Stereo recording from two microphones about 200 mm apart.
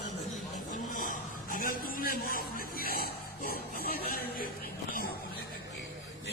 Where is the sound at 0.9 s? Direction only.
40° left (ahead or behind).